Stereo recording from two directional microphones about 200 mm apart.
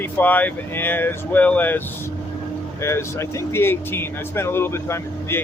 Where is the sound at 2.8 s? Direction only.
15° left (ahead or behind).